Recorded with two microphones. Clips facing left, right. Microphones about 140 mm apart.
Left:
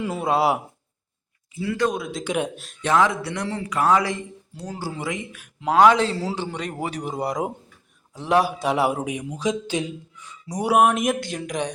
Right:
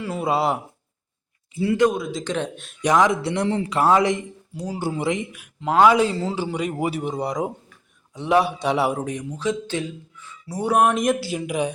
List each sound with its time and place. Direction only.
0.2 s a man's voice: centre (ahead or behind)
1.5 s a man's voice: 25° right (ahead or behind)
1.9 s a man's voice: centre (ahead or behind)
2.3 s speech: 10° left (ahead or behind)
2.8 s a man's voice: 15° right (ahead or behind)
4.8 s a man's voice: 25° right (ahead or behind)
5.5 s a man's voice: 5° left (ahead or behind)
6.4 s a man's voice: 10° right (ahead or behind)